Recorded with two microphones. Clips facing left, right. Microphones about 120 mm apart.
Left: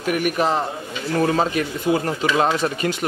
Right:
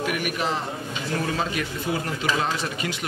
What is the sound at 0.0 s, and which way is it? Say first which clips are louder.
Speech: left 6 dB; 40° left (ahead or behind).